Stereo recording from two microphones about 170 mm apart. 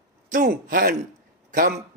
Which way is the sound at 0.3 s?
50° right (ahead or behind).